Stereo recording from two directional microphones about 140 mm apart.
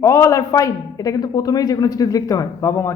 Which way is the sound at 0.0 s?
20° left (ahead or behind).